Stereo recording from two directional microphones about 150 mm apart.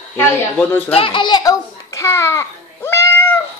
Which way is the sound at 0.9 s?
35° left (ahead or behind).